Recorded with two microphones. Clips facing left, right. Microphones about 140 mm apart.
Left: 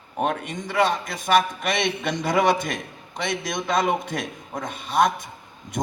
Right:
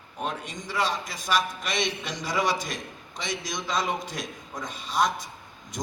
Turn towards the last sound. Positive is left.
turn(degrees=55)  # may be behind; listen again after turning